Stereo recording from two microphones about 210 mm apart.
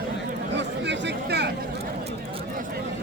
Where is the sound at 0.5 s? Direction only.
55° right (ahead or behind).